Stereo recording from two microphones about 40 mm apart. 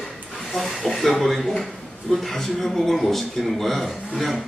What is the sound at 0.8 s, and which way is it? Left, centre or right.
Speech, centre.